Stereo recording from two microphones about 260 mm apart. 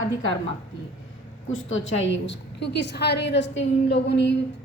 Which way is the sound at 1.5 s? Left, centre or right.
Left.